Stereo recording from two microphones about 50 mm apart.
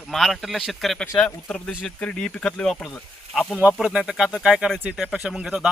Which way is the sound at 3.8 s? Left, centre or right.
Centre.